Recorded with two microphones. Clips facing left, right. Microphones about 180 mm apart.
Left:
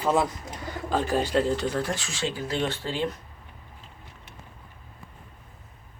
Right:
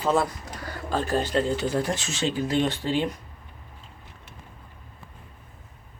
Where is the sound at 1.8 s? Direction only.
20° right (ahead or behind).